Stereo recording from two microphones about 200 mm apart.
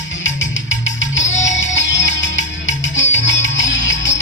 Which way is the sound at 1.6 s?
65° left (ahead or behind).